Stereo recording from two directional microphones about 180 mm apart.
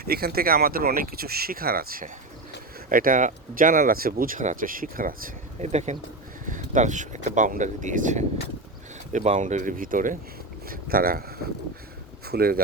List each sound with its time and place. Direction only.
0.0 s speech: 60° right (ahead or behind)
5.6 s speech: 40° right (ahead or behind); by 12.6 s 55° right (ahead or behind)